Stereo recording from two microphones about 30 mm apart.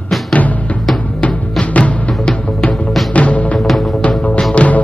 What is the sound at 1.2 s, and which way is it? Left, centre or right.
Music, left.